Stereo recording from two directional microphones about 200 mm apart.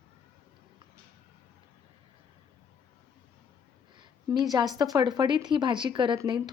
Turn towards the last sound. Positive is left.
turn(degrees=-20)  # may be behind; listen again after turning